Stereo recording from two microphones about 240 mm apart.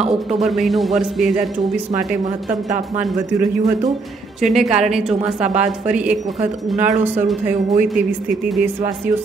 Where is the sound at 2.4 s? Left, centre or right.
Right.